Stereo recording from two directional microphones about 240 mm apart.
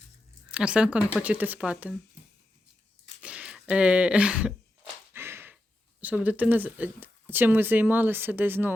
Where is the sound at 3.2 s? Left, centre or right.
Centre.